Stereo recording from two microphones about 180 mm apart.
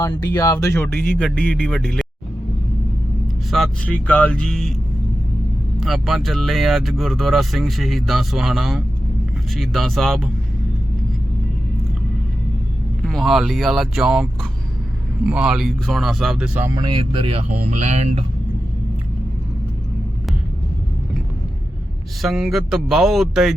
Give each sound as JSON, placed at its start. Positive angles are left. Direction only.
{"t": 0.0, "sound": "speech", "side_deg": 20}
{"t": 3.5, "sound": "speech", "side_deg": 5}
{"t": 5.8, "sound": "speech", "side_deg": 0}
{"t": 13.0, "sound": "speech", "side_deg": 0}
{"t": 16.6, "sound": "speech", "side_deg": -25}
{"t": 22.2, "sound": "speech", "side_deg": 0}